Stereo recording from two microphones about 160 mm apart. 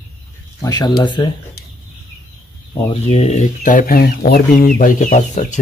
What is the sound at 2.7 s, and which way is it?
Speech, 35° left (ahead or behind).